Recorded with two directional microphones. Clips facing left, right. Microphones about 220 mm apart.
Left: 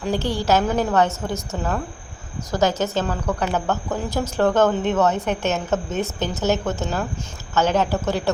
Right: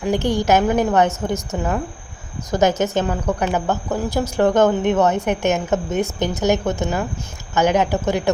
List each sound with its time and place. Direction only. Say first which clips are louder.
0.0 s a woman's voice: right 4 dB; 15° right (ahead or behind)